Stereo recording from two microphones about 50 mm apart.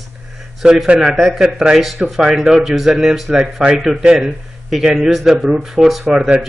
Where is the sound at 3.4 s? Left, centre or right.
Centre.